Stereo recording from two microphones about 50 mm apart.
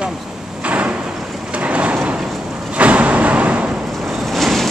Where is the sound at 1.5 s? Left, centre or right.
Right.